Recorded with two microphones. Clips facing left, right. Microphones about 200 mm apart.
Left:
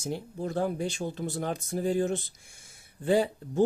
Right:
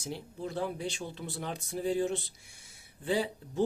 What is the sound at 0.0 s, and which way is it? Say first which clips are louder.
Speech: left 5 dB; 45° left (ahead or behind).